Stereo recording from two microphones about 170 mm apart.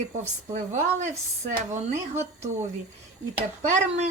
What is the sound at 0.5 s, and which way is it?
Speech, 45° right (ahead or behind).